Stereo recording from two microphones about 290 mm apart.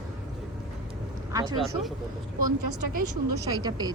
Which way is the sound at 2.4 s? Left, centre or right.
Right.